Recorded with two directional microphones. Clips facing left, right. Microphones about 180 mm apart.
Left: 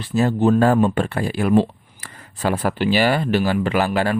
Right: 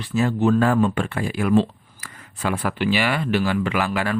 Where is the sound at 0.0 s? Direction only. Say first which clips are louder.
Left 2 dB; 35° left (ahead or behind).